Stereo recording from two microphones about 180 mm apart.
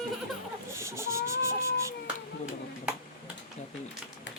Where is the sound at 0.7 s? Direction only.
15° right (ahead or behind).